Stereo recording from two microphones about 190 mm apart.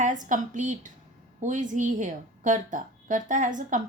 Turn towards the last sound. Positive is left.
turn(degrees=-40)  # may be behind; listen again after turning